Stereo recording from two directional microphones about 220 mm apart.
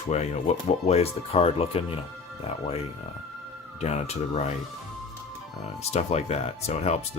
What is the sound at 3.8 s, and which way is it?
Speech, 30° left (ahead or behind).